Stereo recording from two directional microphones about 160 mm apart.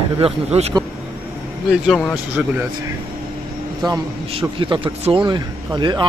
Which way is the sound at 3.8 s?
30° right (ahead or behind).